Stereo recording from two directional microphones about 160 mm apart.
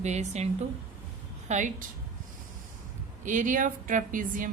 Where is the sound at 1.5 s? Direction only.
55° right (ahead or behind).